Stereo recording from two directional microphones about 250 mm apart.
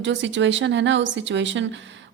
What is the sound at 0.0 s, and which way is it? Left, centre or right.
Speech, right.